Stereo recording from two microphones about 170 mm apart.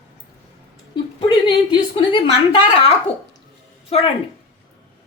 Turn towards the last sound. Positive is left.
turn(degrees=35)  # may be behind; listen again after turning